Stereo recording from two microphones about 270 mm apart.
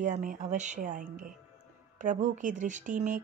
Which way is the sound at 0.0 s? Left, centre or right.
Right.